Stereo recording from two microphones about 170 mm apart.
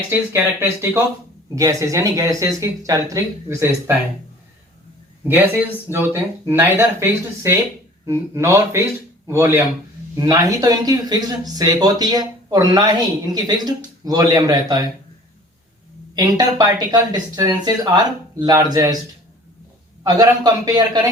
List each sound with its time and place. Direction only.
0.1 s speech: 15° right (ahead or behind)
5.3 s speech: 10° right (ahead or behind)
16.1 s speech: 20° right (ahead or behind)
20.1 s speech: 25° right (ahead or behind)